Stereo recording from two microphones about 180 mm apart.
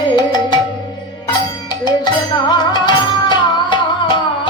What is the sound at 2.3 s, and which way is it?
Music, 25° left (ahead or behind).